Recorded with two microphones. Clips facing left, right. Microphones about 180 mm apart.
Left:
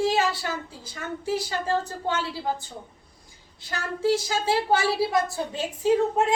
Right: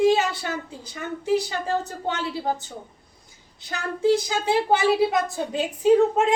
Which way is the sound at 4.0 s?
20° right (ahead or behind).